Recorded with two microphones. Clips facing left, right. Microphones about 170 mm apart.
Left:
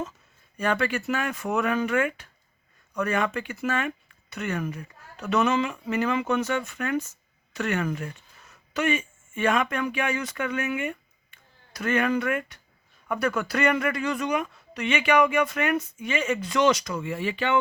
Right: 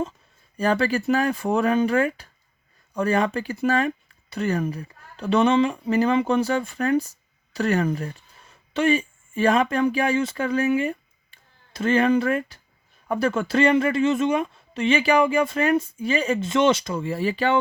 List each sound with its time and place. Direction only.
0.5 s speech: 35° right (ahead or behind)